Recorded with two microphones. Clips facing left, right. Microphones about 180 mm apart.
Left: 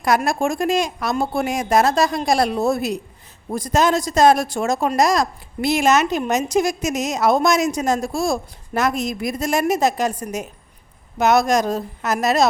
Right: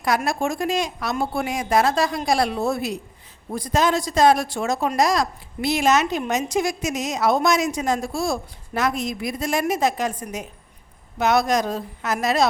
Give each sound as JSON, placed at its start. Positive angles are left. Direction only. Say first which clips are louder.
{"t": 0.0, "sound": "a woman's voice", "louder": "left 3 dB", "side_deg": 45}